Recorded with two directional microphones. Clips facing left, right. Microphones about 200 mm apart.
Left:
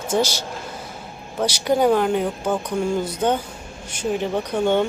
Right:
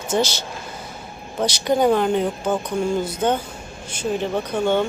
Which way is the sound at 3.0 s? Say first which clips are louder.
Even; 15° left (ahead or behind).